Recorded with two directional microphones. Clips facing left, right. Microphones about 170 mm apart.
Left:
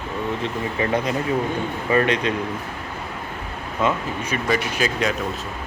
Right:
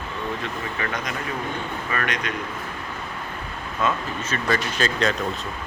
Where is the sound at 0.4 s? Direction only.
25° left (ahead or behind).